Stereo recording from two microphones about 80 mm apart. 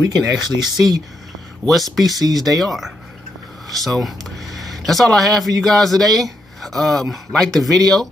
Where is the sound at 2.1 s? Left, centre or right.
Right.